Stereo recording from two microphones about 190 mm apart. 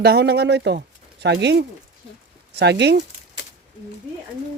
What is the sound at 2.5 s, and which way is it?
Speech, 65° right (ahead or behind).